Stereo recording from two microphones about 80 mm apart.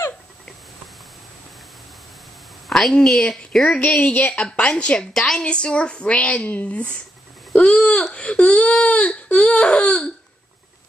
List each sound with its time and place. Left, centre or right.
2.9 s speech: centre